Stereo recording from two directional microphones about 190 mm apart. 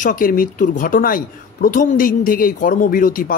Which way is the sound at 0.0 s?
45° left (ahead or behind).